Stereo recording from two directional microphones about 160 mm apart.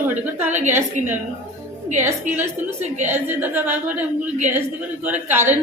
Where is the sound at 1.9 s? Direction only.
50° right (ahead or behind).